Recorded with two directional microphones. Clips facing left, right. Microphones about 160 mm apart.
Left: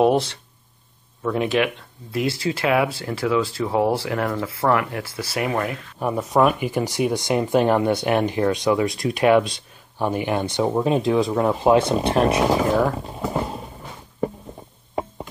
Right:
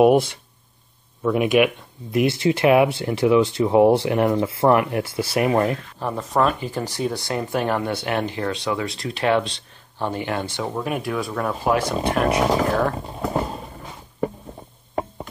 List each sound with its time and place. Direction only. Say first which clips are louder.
0.0 s speech: right 3 dB; 10° right (ahead or behind)
5.9 s speech: left 5 dB; 10° left (ahead or behind)